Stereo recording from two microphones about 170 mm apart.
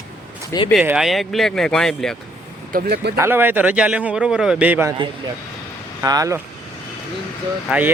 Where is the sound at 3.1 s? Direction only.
15° right (ahead or behind).